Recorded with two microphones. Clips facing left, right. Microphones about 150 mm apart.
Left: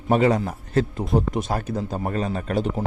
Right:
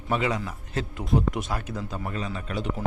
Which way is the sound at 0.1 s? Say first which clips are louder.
Left 8 dB; 40° left (ahead or behind).